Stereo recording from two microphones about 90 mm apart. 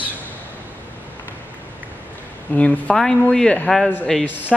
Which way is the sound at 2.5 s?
15° left (ahead or behind).